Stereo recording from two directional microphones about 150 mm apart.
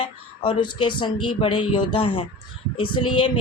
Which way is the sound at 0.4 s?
30° left (ahead or behind).